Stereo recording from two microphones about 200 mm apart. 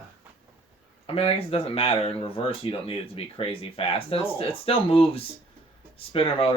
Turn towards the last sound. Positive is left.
turn(degrees=30)  # may be behind; listen again after turning